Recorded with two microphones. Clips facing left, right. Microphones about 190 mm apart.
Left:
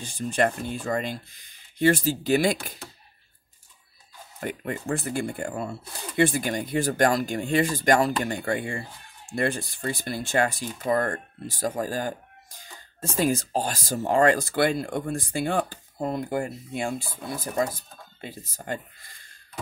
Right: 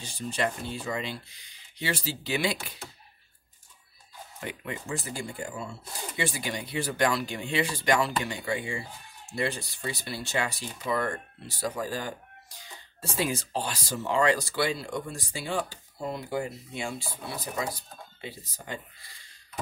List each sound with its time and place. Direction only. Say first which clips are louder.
0.0 s speech: left 6 dB; 50° left (ahead or behind)
4.4 s speech: left 6 dB; 50° left (ahead or behind)